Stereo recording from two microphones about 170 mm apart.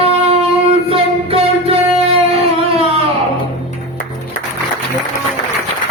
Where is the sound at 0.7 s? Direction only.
35° right (ahead or behind).